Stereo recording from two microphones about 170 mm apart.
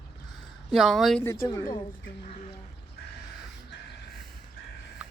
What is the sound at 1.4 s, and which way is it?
Speech, 20° left (ahead or behind).